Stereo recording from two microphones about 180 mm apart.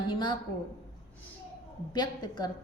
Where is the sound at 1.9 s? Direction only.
25° left (ahead or behind).